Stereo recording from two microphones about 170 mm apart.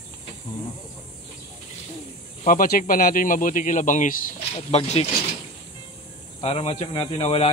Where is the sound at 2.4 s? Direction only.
55° left (ahead or behind).